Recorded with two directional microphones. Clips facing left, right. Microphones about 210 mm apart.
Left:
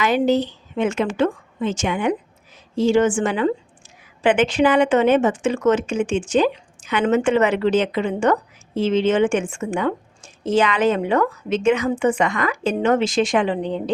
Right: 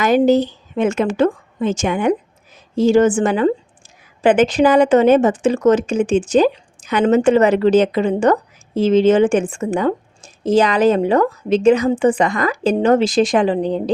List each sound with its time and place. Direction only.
0.0 s a woman's voice: 45° right (ahead or behind)